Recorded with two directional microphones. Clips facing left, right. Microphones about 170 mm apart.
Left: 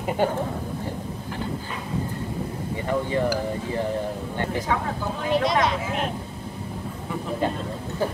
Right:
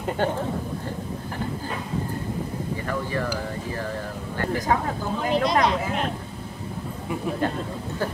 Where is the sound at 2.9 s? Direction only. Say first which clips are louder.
Left 6 dB; 20° left (ahead or behind).